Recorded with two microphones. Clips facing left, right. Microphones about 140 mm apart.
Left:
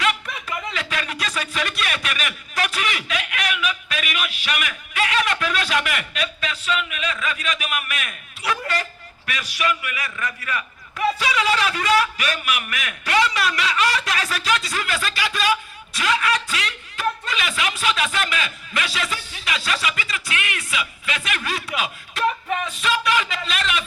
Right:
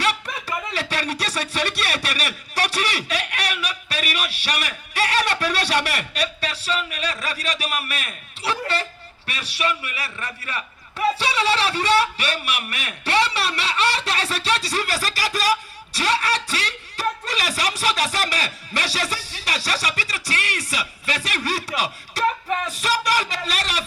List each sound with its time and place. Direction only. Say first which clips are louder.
0.0 s a man's voice: even; 35° right (ahead or behind)